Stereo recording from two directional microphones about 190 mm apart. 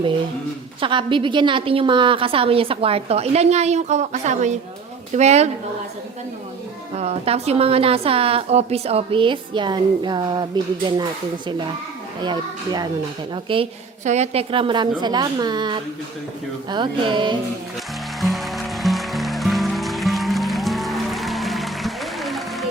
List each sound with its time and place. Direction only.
0.8 s a woman's voice: 25° right (ahead or behind)
6.9 s a woman's voice: 35° right (ahead or behind)
12.2 s a woman's voice: 20° right (ahead or behind)
18.2 s music: centre (ahead or behind)